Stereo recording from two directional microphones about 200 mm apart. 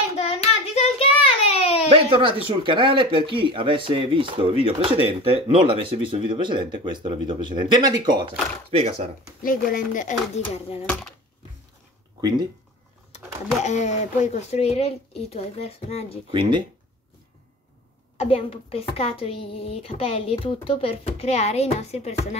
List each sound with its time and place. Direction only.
0.2 s child singing: 30° left (ahead or behind)
1.9 s speech: 25° right (ahead or behind)
9.4 s speech: 45° left (ahead or behind)
10.9 s speech: centre (ahead or behind)
12.2 s speech: 20° right (ahead or behind)
13.6 s speech: 35° left (ahead or behind)
16.3 s speech: 25° right (ahead or behind)
18.1 s a woman's voice: 30° left (ahead or behind)